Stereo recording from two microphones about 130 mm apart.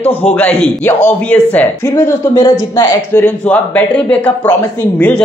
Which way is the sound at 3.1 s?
15° left (ahead or behind).